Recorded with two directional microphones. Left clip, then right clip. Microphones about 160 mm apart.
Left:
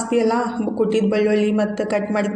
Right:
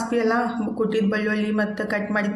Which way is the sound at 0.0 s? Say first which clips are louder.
Left 3 dB; 10° left (ahead or behind).